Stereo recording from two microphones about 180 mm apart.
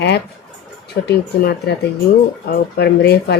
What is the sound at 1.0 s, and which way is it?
Speech, 65° left (ahead or behind).